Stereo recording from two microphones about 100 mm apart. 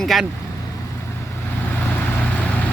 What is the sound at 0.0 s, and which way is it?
Speech, centre (ahead or behind).